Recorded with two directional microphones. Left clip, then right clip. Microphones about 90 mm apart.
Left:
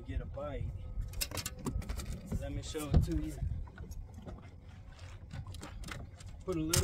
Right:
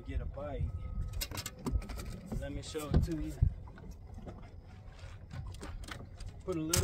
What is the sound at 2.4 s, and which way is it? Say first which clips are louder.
Speech: right 1 dB; 20° right (ahead or behind).